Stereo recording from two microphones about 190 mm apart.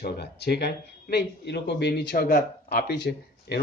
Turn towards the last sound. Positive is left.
turn(degrees=65)  # may be behind; listen again after turning